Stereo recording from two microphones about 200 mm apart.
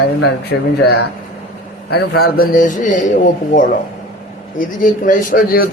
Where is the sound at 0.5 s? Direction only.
65° left (ahead or behind).